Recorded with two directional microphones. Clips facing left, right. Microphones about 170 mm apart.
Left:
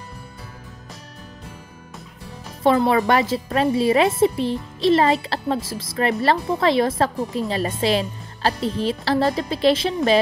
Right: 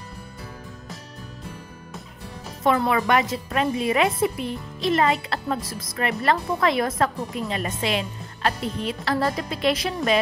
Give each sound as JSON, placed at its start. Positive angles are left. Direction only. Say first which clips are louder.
{"t": 2.6, "sound": "a woman's voice", "louder": "left 4 dB", "side_deg": 30}